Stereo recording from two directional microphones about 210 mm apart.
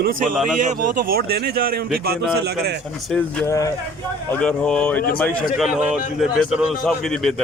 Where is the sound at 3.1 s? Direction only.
5° left (ahead or behind).